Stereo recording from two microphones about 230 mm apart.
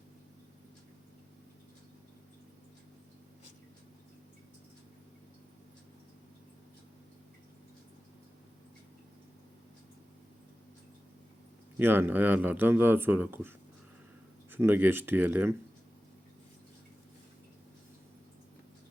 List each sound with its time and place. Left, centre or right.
11.8 s speech: centre
14.5 s speech: centre